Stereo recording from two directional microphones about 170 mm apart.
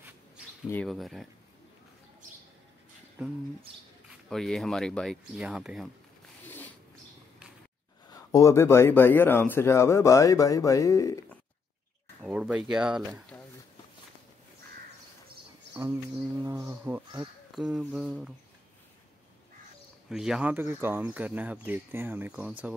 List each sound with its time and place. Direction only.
0.8 s speech: centre (ahead or behind)
4.3 s speech: centre (ahead or behind)
6.4 s a sound: 10° left (ahead or behind)
8.1 s a man's voice: 20° left (ahead or behind)
12.2 s speech: 5° right (ahead or behind)
15.7 s speech: 15° right (ahead or behind)
20.1 s speech: 5° right (ahead or behind)